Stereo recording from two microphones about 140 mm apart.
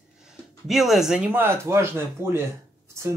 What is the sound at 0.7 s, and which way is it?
Speech, centre (ahead or behind).